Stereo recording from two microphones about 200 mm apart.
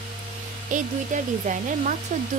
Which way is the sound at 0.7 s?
40° right (ahead or behind).